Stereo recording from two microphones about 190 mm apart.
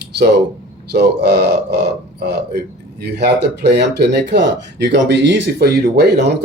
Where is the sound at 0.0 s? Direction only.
60° right (ahead or behind).